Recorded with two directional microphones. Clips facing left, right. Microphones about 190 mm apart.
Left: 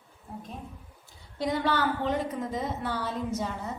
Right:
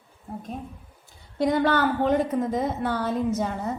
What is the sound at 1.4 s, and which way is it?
A woman's voice, 50° right (ahead or behind).